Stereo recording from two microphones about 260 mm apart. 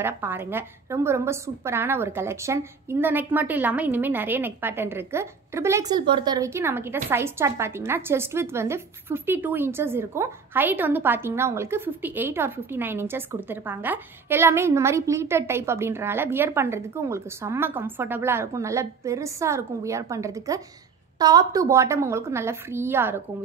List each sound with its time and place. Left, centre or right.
0.0 s a woman's voice: centre